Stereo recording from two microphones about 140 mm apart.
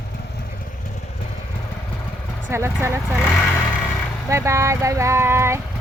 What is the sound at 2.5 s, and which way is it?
Speech, 20° right (ahead or behind).